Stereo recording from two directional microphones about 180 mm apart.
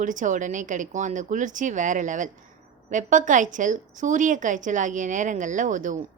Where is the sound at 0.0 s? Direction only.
45° right (ahead or behind).